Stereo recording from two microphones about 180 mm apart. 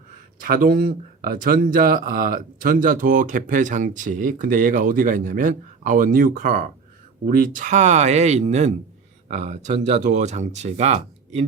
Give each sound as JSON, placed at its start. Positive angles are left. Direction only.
{"t": 0.3, "sound": "speech", "side_deg": -50}